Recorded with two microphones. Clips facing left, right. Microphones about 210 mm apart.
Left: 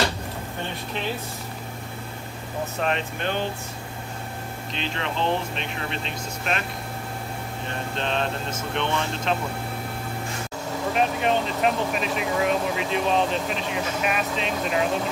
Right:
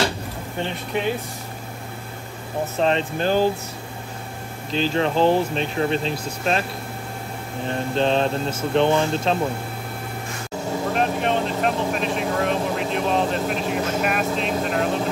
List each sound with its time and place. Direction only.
2.8 s speech: 30° right (ahead or behind)
4.7 s speech: 35° right (ahead or behind)
7.9 s speech: 35° right (ahead or behind)
11.0 s speech: centre (ahead or behind)